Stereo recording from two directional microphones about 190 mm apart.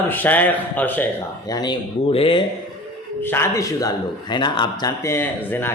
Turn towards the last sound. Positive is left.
turn(degrees=10)  # may be behind; listen again after turning